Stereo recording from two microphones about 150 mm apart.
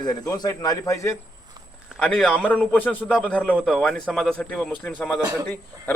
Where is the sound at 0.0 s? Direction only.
25° left (ahead or behind).